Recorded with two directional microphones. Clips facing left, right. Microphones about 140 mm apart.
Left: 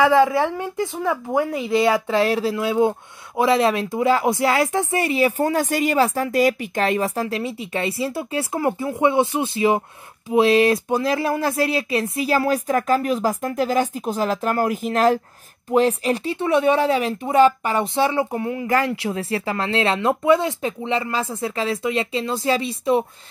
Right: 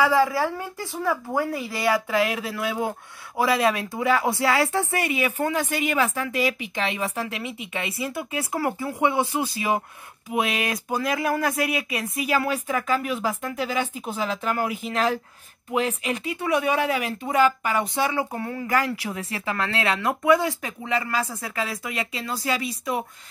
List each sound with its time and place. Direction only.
0.0 s a woman's voice: 20° left (ahead or behind); by 15.1 s 50° left (ahead or behind)
15.7 s a woman's voice: 35° left (ahead or behind)